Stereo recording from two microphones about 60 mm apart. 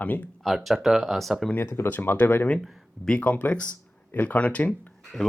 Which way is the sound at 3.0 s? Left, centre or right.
Left.